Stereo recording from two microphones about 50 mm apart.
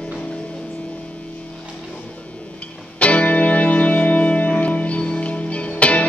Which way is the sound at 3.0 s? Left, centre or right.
Left.